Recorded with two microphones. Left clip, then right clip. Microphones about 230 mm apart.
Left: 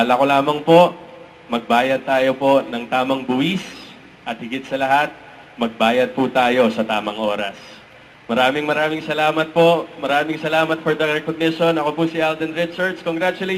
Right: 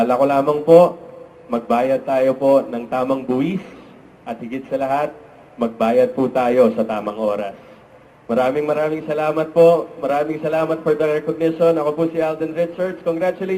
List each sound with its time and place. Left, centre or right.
0.0 s a man's voice: centre